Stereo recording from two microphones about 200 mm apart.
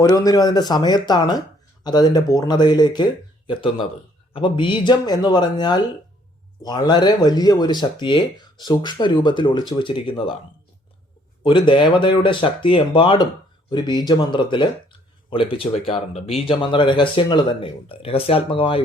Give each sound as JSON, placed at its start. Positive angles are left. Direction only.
{"t": 0.0, "sound": "speech", "side_deg": 15}
{"t": 11.4, "sound": "speech", "side_deg": 25}